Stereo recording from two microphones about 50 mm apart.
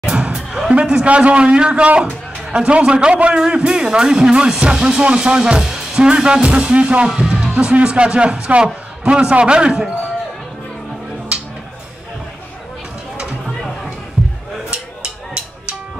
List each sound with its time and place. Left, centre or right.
0.1 s a sound: centre
0.7 s speech: centre
7.1 s speech: centre